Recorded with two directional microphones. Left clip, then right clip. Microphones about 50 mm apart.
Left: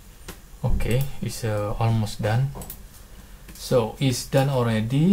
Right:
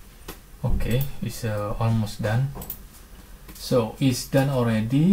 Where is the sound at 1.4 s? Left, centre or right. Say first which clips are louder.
Left 2 dB; centre.